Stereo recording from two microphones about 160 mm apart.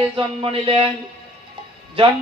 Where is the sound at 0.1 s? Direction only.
35° right (ahead or behind).